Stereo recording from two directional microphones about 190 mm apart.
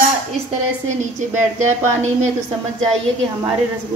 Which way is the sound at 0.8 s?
40° right (ahead or behind).